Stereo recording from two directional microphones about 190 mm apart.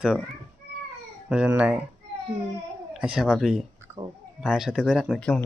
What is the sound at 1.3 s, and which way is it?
Speech, 5° right (ahead or behind).